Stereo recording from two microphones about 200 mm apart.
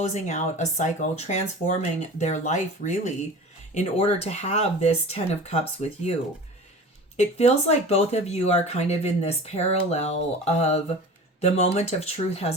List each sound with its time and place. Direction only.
0.1 s speech: 40° left (ahead or behind)
7.2 s speech: 30° left (ahead or behind)